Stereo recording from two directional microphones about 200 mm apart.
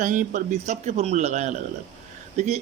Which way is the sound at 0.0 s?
40° right (ahead or behind).